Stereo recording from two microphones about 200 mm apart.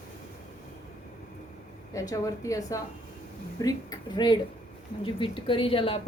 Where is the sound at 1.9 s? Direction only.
15° left (ahead or behind).